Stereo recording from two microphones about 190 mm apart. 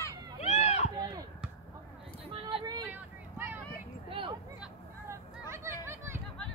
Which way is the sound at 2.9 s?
10° right (ahead or behind).